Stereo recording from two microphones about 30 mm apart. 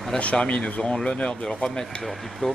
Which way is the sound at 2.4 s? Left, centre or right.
Left.